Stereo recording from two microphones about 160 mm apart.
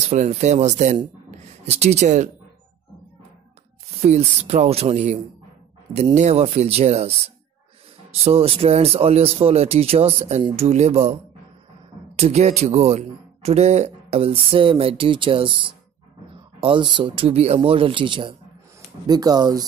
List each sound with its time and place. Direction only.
0.1 s speech: 45° right (ahead or behind)
4.0 s speech: 40° right (ahead or behind)
12.2 s speech: 40° right (ahead or behind); by 19.6 s 25° right (ahead or behind)